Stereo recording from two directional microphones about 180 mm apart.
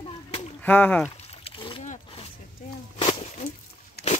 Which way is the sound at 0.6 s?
10° left (ahead or behind).